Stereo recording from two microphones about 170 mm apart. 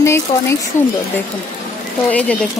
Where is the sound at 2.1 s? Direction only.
5° left (ahead or behind).